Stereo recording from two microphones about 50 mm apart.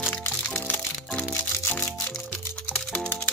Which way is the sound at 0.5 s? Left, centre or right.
Left.